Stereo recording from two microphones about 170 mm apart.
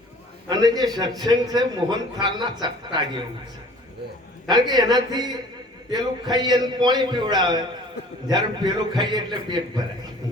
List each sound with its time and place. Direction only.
0.4 s a man's voice: 25° right (ahead or behind)
4.4 s a man's voice: 25° right (ahead or behind)